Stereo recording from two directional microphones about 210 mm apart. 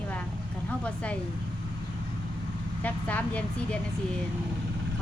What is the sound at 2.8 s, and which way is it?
Speech, 5° left (ahead or behind).